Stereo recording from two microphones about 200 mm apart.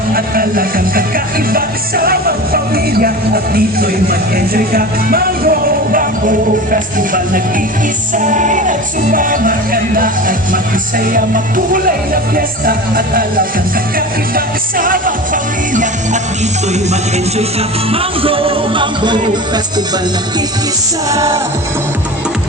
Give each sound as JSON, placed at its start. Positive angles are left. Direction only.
{"t": 0.1, "sound": "music", "side_deg": -45}
{"t": 17.9, "sound": "music", "side_deg": -25}
{"t": 21.1, "sound": "music", "side_deg": -15}